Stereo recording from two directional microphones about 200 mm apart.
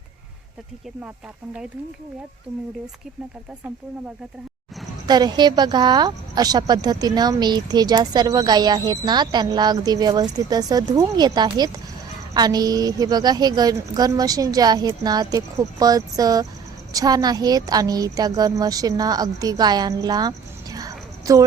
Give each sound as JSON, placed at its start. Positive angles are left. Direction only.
{"t": 5.0, "sound": "speech", "side_deg": -20}